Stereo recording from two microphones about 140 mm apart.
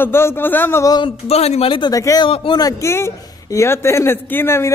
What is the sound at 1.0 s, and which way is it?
Speech, 40° left (ahead or behind).